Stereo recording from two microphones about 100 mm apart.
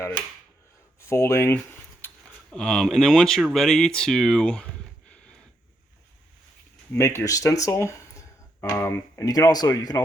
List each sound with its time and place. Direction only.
0.9 s speech: 25° left (ahead or behind)
2.5 s speech: 5° left (ahead or behind)
6.9 s speech: 25° left (ahead or behind); by 10.0 s 40° left (ahead or behind)